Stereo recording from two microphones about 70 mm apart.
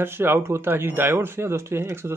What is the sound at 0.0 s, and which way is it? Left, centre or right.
Speech, right.